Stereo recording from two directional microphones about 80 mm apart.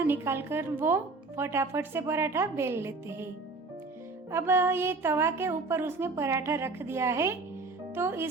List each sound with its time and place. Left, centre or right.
0.0 s speech: right
4.3 s speech: right